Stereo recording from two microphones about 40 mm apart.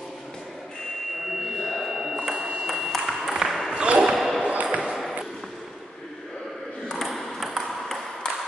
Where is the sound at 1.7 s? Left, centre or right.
Centre.